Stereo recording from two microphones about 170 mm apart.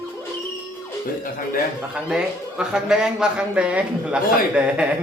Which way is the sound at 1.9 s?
5° right (ahead or behind).